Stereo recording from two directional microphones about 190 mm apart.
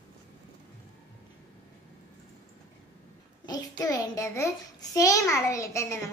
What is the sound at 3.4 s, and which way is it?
A child's voice, 20° left (ahead or behind).